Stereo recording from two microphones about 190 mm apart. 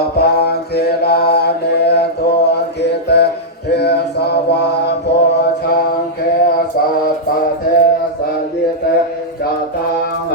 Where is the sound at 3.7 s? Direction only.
60° left (ahead or behind).